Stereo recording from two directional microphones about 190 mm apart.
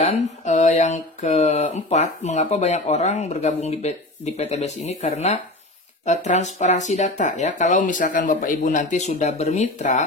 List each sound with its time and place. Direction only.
0.0 s speech: 35° left (ahead or behind)